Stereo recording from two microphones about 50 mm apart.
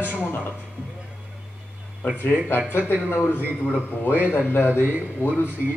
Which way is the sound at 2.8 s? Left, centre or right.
Right.